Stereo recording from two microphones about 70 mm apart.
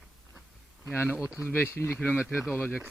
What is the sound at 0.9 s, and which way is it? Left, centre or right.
Speech, left.